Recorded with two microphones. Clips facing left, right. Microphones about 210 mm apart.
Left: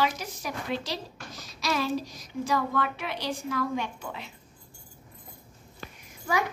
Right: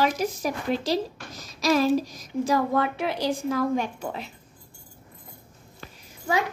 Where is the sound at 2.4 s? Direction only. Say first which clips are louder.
Right 4 dB; 40° right (ahead or behind).